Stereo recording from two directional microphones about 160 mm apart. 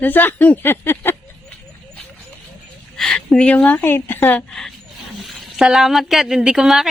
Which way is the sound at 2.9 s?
5° left (ahead or behind).